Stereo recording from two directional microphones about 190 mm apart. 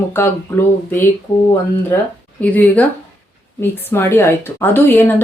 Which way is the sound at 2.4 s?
10° left (ahead or behind).